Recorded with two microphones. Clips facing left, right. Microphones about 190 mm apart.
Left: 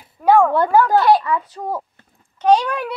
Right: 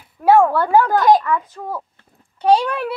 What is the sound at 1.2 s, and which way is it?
Speech, 15° left (ahead or behind).